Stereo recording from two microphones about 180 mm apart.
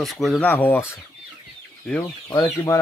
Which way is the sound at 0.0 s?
Centre (ahead or behind).